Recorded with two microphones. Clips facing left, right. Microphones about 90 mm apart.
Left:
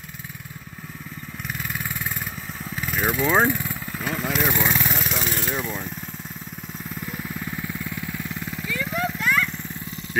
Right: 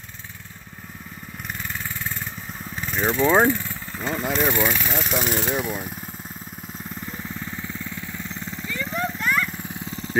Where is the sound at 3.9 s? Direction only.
Centre (ahead or behind).